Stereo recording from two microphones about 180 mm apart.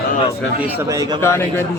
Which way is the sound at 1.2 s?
15° left (ahead or behind).